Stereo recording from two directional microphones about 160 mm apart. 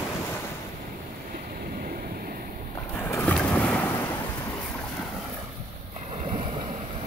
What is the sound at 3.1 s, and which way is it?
Boat, 5° left (ahead or behind).